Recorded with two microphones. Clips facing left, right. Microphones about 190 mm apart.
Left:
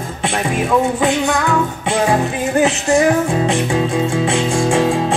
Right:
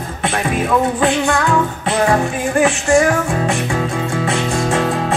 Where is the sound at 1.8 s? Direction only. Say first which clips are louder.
Even; 20° left (ahead or behind).